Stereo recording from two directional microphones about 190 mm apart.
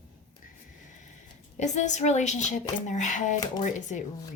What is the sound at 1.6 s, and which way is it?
A woman's voice, 40° left (ahead or behind).